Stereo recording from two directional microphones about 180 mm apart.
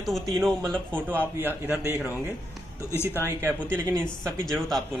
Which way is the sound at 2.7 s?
15° left (ahead or behind).